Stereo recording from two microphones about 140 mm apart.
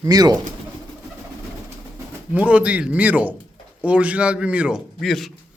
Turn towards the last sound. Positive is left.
turn(degrees=0)  # may be behind; listen again after turning